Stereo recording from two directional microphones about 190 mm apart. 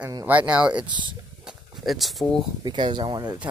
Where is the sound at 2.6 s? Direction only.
25° right (ahead or behind).